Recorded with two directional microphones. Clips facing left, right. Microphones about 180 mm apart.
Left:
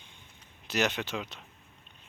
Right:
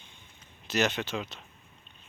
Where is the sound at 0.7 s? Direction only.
15° left (ahead or behind).